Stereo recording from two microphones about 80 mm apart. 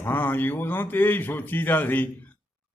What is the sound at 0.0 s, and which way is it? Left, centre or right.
A man's voice, left.